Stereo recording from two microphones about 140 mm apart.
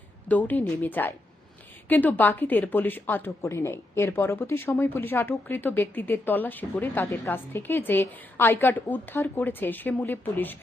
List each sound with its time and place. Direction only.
0.3 s a woman's voice: 10° left (ahead or behind)